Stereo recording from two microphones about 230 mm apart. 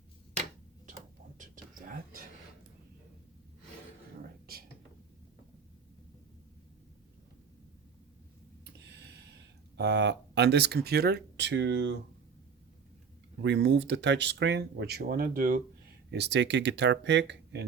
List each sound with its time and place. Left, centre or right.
9.7 s speech: right
13.4 s speech: right
16.1 s speech: right